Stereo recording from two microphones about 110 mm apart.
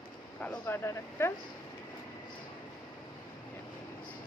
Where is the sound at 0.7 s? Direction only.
25° left (ahead or behind).